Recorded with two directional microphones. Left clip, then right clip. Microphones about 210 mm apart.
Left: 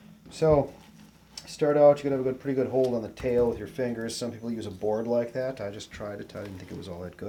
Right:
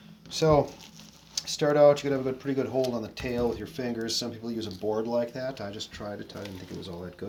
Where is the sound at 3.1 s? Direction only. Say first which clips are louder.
Left 7 dB; 30° left (ahead or behind).